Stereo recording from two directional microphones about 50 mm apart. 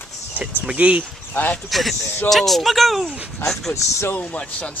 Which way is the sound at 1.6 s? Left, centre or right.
Centre.